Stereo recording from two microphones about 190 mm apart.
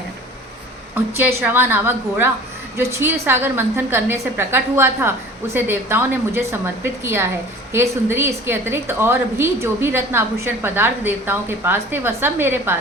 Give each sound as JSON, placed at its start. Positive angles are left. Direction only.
{"t": 1.1, "sound": "a woman's voice", "side_deg": -10}